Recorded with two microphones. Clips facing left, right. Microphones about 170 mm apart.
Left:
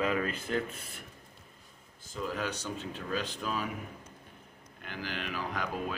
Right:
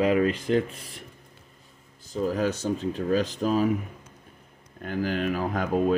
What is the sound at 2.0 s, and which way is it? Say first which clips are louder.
Speech: right 9 dB; 40° right (ahead or behind).